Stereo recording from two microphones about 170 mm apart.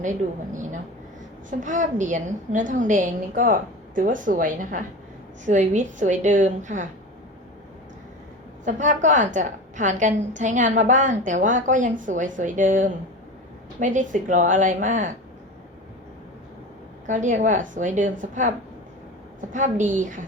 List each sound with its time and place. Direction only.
1.5 s a woman's voice: 45° right (ahead or behind)
8.6 s a woman's voice: 45° right (ahead or behind)
17.1 s a woman's voice: 45° right (ahead or behind)